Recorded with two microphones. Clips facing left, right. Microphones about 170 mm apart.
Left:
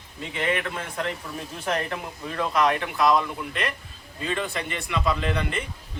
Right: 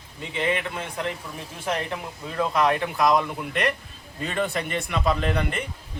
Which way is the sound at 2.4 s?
25° right (ahead or behind).